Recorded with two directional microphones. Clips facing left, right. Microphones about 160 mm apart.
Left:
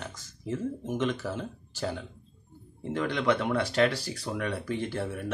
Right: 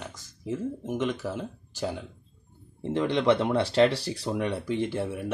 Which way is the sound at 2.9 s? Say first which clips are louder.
Right 4 dB; 25° right (ahead or behind).